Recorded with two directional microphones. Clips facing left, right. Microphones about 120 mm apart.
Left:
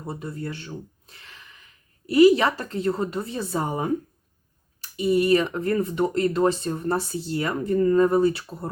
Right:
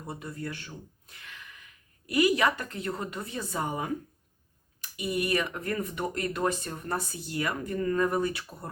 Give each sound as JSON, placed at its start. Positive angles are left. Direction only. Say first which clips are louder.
{"t": 0.0, "sound": "speech", "louder": "left 5 dB", "side_deg": 30}